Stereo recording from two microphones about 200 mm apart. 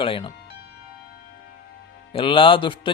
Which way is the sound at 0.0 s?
25° left (ahead or behind).